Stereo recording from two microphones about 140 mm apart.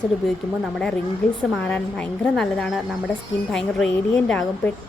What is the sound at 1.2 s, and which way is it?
A woman's voice, 5° left (ahead or behind).